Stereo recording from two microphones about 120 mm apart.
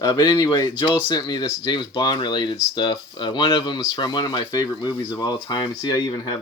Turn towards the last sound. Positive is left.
turn(degrees=35)  # may be behind; listen again after turning